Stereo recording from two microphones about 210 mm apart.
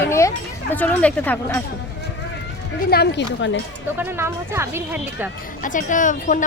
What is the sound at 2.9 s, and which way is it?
Speech, 55° left (ahead or behind).